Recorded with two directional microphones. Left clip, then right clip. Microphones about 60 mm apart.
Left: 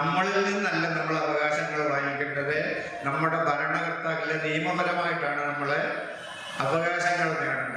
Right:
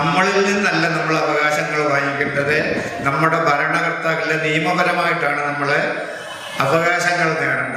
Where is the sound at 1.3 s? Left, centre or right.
Right.